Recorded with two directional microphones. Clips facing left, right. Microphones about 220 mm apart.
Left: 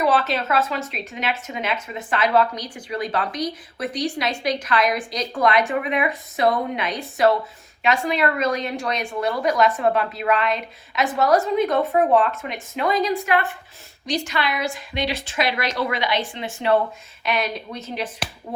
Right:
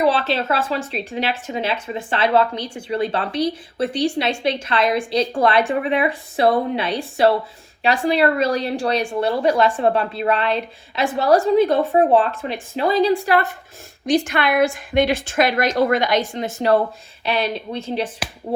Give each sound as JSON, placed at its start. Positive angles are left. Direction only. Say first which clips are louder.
{"t": 0.0, "sound": "a woman's voice", "louder": "right 2 dB", "side_deg": -30}
{"t": 14.1, "sound": "a woman's voice", "louder": "right 7 dB", "side_deg": -55}